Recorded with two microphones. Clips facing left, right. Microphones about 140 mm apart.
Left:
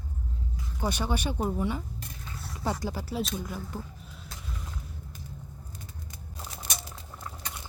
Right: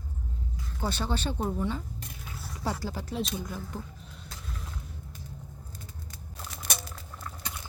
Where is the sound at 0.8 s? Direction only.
15° left (ahead or behind).